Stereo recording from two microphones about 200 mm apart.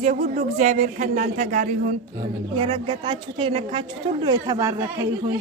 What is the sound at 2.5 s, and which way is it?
A woman's voice, 25° right (ahead or behind).